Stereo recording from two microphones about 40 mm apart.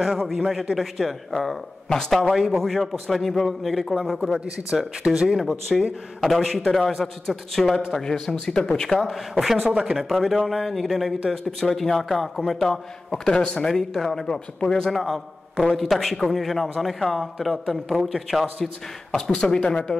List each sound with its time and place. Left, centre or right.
0.2 s a man's voice: centre
5.0 s a man's voice: centre
9.7 s speech: centre
10.2 s a man's voice: centre
13.2 s a man's voice: centre
15.0 s a man's voice: centre
19.1 s speech: centre